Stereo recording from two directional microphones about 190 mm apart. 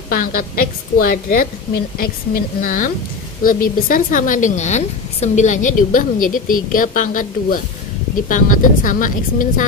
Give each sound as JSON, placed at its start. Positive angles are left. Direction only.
{"t": 0.1, "sound": "a woman's voice", "side_deg": 45}